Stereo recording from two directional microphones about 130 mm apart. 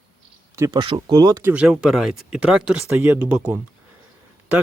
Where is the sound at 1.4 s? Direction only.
15° right (ahead or behind).